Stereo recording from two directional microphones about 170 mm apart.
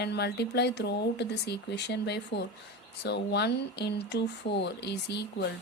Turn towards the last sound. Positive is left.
turn(degrees=80)